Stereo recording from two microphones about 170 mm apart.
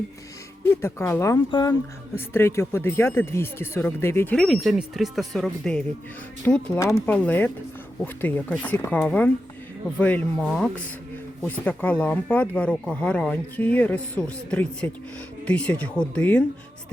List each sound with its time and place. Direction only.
0.7 s speech: 15° left (ahead or behind)
1.5 s speech: 25° left (ahead or behind)
2.1 s speech: 15° left (ahead or behind)
4.4 s speech: centre (ahead or behind)